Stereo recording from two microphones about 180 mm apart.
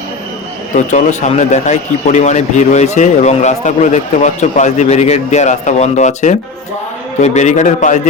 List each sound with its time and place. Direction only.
0.8 s a man's voice: 40° left (ahead or behind)